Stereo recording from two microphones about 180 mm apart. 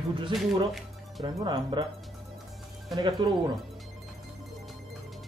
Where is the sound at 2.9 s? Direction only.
25° right (ahead or behind).